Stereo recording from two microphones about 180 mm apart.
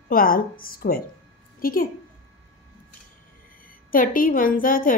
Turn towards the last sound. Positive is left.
turn(degrees=50)  # may be behind; listen again after turning